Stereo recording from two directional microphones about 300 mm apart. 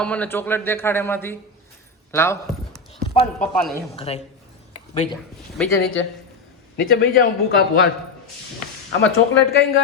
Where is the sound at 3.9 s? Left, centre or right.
Centre.